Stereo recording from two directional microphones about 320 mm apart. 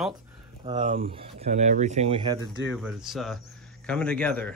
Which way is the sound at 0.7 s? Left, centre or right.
Right.